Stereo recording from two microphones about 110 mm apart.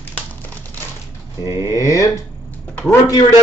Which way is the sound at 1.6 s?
30° left (ahead or behind).